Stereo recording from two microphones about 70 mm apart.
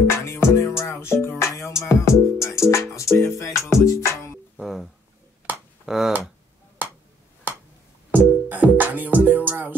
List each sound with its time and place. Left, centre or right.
0.0 s music: left
4.6 s a sound: centre
5.9 s tick-tock: centre
8.1 s music: right